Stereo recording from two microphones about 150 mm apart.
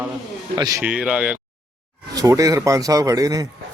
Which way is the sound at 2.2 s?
20° right (ahead or behind).